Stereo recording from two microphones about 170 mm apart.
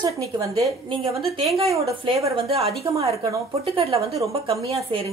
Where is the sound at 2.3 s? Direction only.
35° right (ahead or behind).